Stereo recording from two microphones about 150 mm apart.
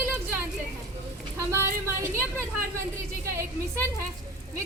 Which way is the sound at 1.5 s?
15° right (ahead or behind).